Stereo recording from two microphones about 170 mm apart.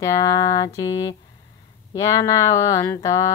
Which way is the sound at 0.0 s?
20° left (ahead or behind).